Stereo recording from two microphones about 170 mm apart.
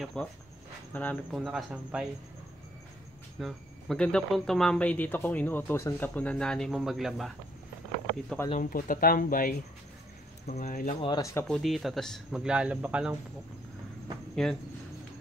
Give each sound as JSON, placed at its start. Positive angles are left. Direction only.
{"t": 0.0, "sound": "speech", "side_deg": 5}
{"t": 3.3, "sound": "speech", "side_deg": 0}
{"t": 8.5, "sound": "speech", "side_deg": 55}
{"t": 11.0, "sound": "speech", "side_deg": 25}
{"t": 11.4, "sound": "speech", "side_deg": 0}
{"t": 14.3, "sound": "speech", "side_deg": 0}